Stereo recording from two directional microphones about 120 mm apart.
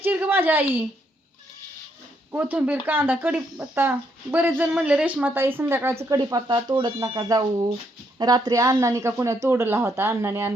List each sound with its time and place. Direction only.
0.0 s a sound: 15° right (ahead or behind)
2.3 s speech: 15° right (ahead or behind)
6.1 s speech: 35° right (ahead or behind)